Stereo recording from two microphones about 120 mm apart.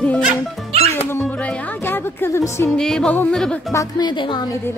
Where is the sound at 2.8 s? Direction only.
5° left (ahead or behind).